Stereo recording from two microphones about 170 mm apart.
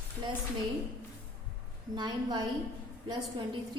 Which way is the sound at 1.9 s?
25° right (ahead or behind).